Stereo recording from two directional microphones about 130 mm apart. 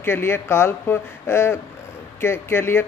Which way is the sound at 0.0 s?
20° left (ahead or behind).